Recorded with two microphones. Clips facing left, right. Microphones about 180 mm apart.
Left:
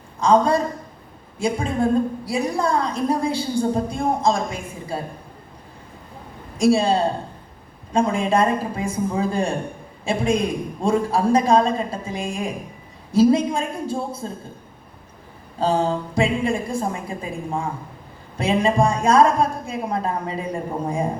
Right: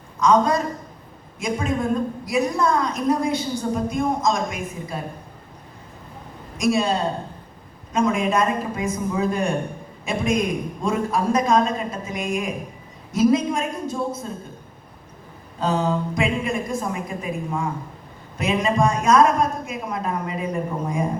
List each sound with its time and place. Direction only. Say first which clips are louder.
0.2 s a woman's voice: left 1 dB; 30° left (ahead or behind)
6.6 s a woman's voice: left 3 dB; 30° left (ahead or behind)
15.6 s a woman's voice: left 1 dB; 30° left (ahead or behind)